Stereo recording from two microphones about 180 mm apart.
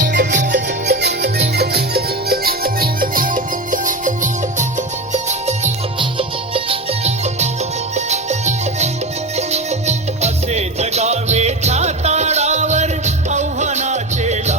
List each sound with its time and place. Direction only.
0.1 s music: 75° right (ahead or behind); by 14.5 s 40° right (ahead or behind)